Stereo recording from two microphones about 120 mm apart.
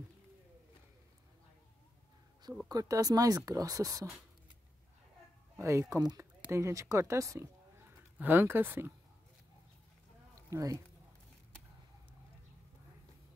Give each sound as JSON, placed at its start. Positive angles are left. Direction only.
{"t": 2.7, "sound": "speech", "side_deg": -30}
{"t": 5.6, "sound": "speech", "side_deg": -25}
{"t": 10.5, "sound": "speech", "side_deg": -25}